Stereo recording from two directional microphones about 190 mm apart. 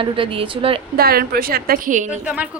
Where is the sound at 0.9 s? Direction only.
55° right (ahead or behind).